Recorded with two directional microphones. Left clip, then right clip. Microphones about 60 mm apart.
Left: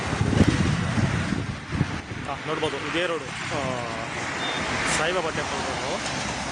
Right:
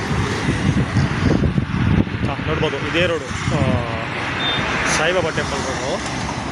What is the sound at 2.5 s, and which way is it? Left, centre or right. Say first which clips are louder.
Speech: right 5 dB; left.